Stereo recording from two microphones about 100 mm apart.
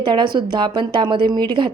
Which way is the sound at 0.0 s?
50° right (ahead or behind).